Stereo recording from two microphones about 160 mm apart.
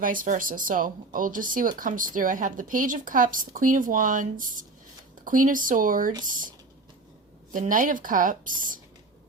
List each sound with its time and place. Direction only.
0.0 s speech: 60° right (ahead or behind)
7.5 s speech: 55° right (ahead or behind)